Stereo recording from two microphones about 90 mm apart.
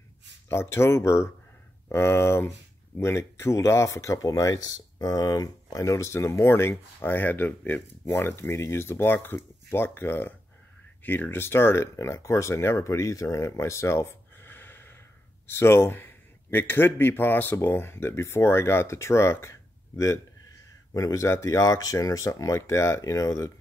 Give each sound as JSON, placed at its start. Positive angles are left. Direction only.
{"t": 0.5, "sound": "speech", "side_deg": 30}
{"t": 20.9, "sound": "speech", "side_deg": 40}